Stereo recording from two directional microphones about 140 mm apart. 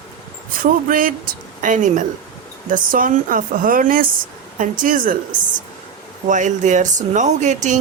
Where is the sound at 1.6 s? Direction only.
65° right (ahead or behind).